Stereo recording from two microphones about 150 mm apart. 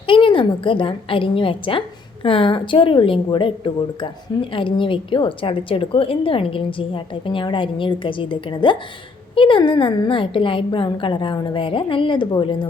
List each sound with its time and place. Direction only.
0.1 s a woman's voice: 35° left (ahead or behind)